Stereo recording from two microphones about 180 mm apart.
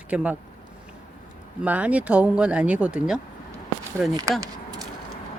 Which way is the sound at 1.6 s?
10° right (ahead or behind).